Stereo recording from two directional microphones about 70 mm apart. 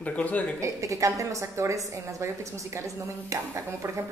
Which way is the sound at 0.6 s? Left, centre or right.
Right.